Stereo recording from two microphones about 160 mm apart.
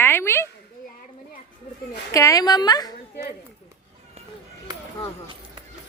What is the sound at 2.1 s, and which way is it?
Speech, 20° left (ahead or behind).